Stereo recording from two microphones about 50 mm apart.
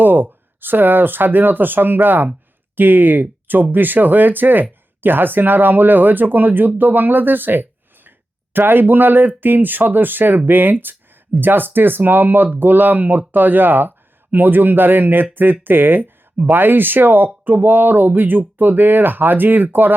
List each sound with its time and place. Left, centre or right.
0.0 s speech: right